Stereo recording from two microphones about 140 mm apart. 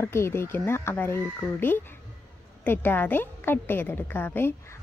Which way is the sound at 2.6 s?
15° left (ahead or behind).